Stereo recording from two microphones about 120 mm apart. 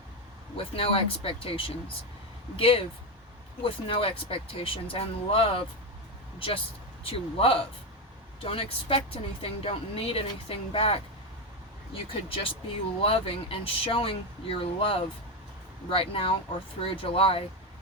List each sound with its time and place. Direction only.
0.5 s speech: 50° left (ahead or behind)
7.0 s speech: 50° left (ahead or behind)
12.0 s speech: 50° left (ahead or behind)